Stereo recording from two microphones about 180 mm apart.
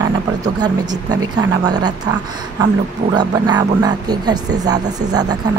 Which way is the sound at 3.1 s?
20° right (ahead or behind).